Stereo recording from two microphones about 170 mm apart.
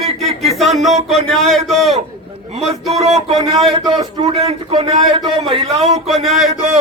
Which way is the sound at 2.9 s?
40° right (ahead or behind).